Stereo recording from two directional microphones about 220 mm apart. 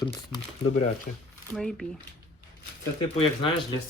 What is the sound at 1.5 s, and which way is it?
Speech, centre (ahead or behind).